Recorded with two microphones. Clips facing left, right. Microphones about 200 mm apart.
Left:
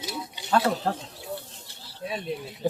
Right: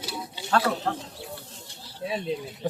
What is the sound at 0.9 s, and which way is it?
Speech, 35° left (ahead or behind).